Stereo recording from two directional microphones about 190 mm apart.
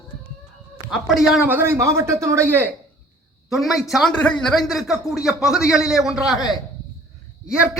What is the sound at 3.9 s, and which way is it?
A man's voice, centre (ahead or behind).